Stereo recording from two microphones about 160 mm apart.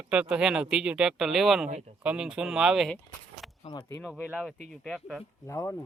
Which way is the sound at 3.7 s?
20° left (ahead or behind).